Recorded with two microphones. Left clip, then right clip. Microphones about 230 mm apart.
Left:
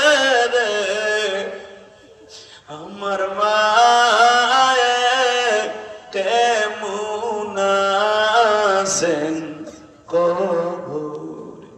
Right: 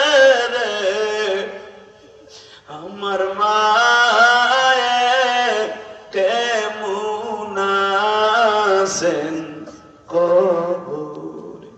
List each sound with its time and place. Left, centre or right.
0.0 s music: left
3.0 s chant: left
6.1 s music: left